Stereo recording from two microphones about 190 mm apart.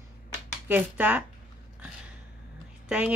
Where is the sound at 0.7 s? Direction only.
10° right (ahead or behind).